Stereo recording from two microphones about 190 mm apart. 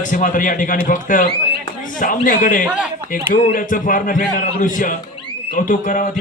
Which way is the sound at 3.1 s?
45° left (ahead or behind).